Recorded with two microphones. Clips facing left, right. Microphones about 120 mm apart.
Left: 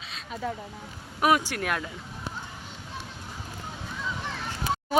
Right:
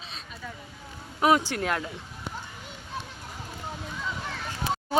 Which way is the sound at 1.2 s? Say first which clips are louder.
Right 1 dB; 20° right (ahead or behind).